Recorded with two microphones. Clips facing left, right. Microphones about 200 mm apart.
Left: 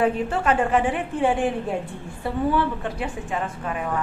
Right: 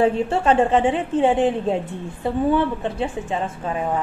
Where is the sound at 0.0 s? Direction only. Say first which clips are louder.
Right 3 dB; 30° right (ahead or behind).